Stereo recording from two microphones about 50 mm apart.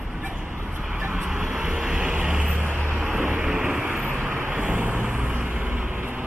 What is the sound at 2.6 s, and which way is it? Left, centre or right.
Vehicle, right.